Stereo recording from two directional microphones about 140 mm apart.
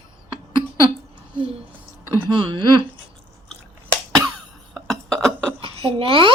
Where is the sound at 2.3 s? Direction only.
35° right (ahead or behind).